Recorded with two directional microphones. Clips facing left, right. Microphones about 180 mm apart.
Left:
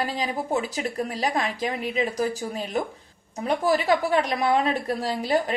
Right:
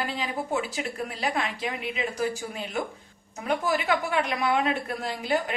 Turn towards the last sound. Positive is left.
turn(degrees=35)  # may be behind; listen again after turning